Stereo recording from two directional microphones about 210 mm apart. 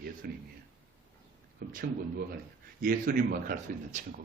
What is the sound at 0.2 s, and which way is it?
Speech, 45° right (ahead or behind).